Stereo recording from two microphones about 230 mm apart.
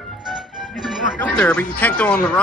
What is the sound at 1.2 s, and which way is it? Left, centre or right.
Speech, centre.